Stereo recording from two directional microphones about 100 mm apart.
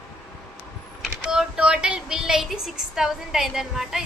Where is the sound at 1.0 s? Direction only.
5° right (ahead or behind).